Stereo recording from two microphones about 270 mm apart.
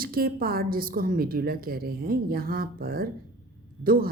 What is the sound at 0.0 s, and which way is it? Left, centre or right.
A woman's voice, right.